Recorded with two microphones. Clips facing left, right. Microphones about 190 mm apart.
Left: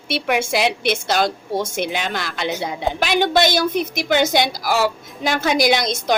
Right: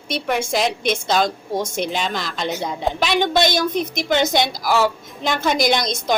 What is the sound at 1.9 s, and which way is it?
Speech, 60° left (ahead or behind).